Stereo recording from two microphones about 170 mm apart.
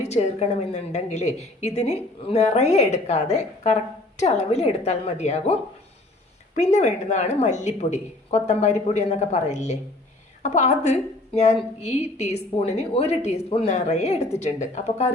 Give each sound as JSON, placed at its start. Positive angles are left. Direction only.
{"t": 0.1, "sound": "a woman's voice", "side_deg": 40}
{"t": 6.6, "sound": "a woman's voice", "side_deg": 45}